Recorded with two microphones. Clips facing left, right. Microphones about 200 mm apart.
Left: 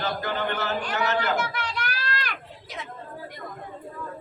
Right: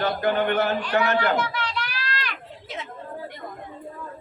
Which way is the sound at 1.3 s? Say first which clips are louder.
Right 2 dB; 50° left (ahead or behind).